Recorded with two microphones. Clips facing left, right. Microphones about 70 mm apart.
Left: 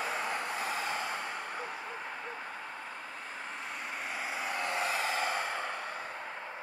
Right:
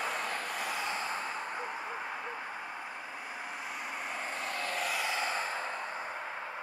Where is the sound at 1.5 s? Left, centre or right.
Centre.